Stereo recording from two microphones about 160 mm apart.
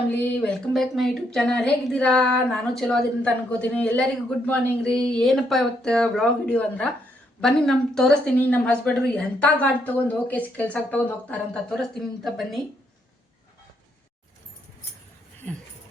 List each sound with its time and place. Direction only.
0.2 s speech: 5° left (ahead or behind)